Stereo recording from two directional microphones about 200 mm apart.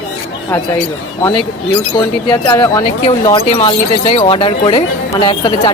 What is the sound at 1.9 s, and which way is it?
Speech, 25° left (ahead or behind).